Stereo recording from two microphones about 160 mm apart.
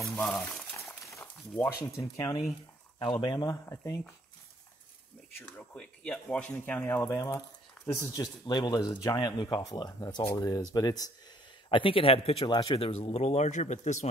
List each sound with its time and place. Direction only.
0.1 s speech: 10° left (ahead or behind)
1.0 s a sound: 15° left (ahead or behind)
1.8 s speech: 20° left (ahead or behind)
5.6 s speech: 5° left (ahead or behind); by 14.0 s 45° left (ahead or behind)